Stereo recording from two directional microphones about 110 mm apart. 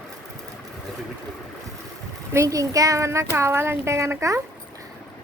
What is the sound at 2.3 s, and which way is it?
Speech, 30° right (ahead or behind).